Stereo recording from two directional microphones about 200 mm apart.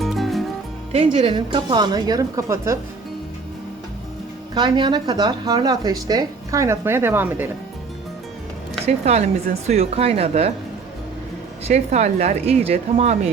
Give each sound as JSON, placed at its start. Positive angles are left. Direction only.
{"t": 0.0, "sound": "music", "side_deg": 0}
{"t": 0.9, "sound": "a woman's voice", "side_deg": -25}
{"t": 4.5, "sound": "a woman's voice", "side_deg": -20}
{"t": 8.9, "sound": "speech", "side_deg": -30}
{"t": 11.7, "sound": "speech", "side_deg": -35}